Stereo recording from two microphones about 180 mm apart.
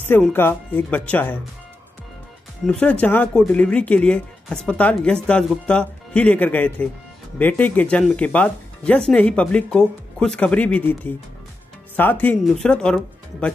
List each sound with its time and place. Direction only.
0.0 s speech: 10° left (ahead or behind)
2.6 s speech: 5° left (ahead or behind)